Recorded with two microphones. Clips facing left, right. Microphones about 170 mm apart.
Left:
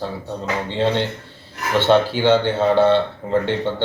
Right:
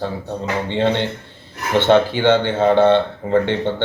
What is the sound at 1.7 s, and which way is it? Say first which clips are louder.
Speech: right 2 dB; 20° right (ahead or behind).